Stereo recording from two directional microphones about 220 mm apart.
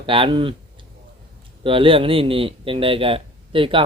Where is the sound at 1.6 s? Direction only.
25° right (ahead or behind).